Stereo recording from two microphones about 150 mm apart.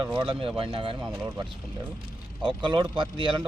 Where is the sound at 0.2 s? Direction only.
35° right (ahead or behind).